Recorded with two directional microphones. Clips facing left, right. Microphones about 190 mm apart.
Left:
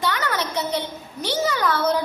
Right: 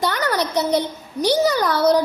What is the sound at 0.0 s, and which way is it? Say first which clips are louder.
A child's voice: right 4 dB; 40° right (ahead or behind).